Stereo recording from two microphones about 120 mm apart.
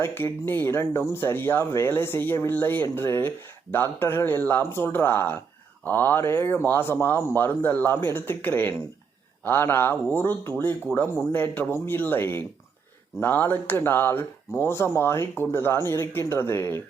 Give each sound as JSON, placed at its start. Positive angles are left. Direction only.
{"t": 0.0, "sound": "speech", "side_deg": 15}